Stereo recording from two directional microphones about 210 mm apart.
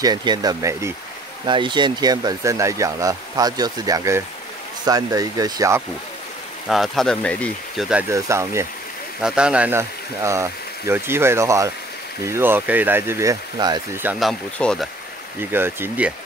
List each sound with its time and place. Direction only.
0.0 s speech: 20° right (ahead or behind)
6.7 s speech: centre (ahead or behind)
8.1 s speech: 15° right (ahead or behind)
14.0 s speech: centre (ahead or behind)
15.5 s speech: 10° right (ahead or behind)